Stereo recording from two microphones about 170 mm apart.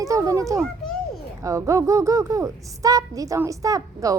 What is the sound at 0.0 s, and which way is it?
A child's voice, 20° right (ahead or behind).